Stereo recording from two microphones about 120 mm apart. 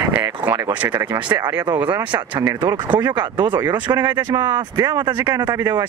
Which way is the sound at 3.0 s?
35° right (ahead or behind).